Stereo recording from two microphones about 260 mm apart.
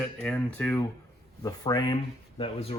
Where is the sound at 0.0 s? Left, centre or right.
Centre.